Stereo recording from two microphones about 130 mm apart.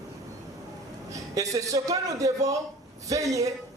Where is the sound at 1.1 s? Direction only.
25° right (ahead or behind).